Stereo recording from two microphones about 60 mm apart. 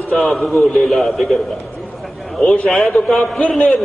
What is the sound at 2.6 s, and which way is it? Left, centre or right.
Speech, centre.